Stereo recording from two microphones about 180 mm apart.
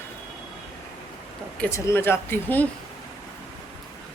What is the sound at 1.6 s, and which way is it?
Speech, 15° left (ahead or behind).